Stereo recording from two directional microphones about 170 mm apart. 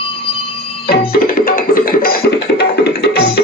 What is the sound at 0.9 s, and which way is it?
Music, 60° left (ahead or behind).